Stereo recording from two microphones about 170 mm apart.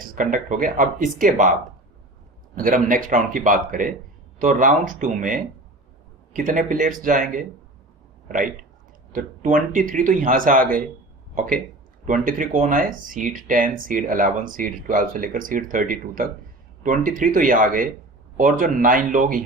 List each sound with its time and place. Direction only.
0.0 s a sound: 55° right (ahead or behind)
0.4 s speech: 50° right (ahead or behind)
2.6 s speech: 50° right (ahead or behind)
9.1 s speech: 50° right (ahead or behind)